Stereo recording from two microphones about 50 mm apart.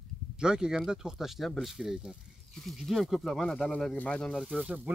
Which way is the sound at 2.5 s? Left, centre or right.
Centre.